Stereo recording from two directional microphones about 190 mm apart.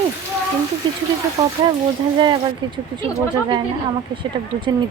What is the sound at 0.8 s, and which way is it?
Speech, 25° right (ahead or behind).